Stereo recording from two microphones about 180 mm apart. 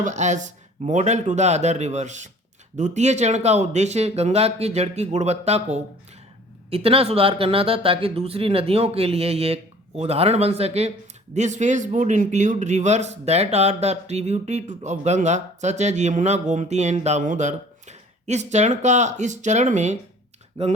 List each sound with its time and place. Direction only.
0.0 s speech: 40° right (ahead or behind)